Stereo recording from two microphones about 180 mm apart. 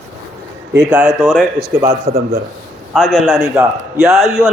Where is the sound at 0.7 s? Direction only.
10° right (ahead or behind).